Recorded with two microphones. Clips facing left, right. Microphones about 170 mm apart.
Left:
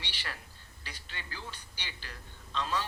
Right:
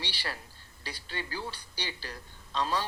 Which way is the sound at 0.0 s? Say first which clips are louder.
Right 5 dB; 35° right (ahead or behind).